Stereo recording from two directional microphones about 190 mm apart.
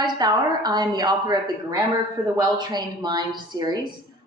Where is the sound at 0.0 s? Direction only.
20° right (ahead or behind).